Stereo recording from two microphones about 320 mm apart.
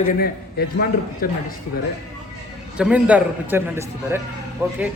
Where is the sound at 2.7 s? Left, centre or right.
Centre.